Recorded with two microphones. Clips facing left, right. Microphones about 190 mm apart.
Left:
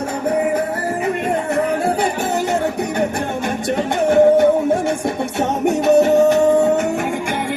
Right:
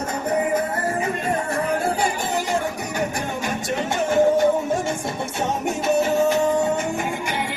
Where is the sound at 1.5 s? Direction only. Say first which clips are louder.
Left 6 dB; 60° left (ahead or behind).